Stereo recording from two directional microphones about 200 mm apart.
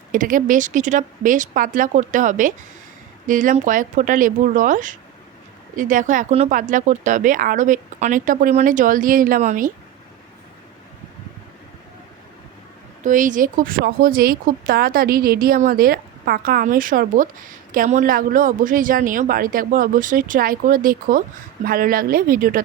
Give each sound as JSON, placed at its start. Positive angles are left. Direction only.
{"t": 0.1, "sound": "speech", "side_deg": -40}
{"t": 13.0, "sound": "speech", "side_deg": -40}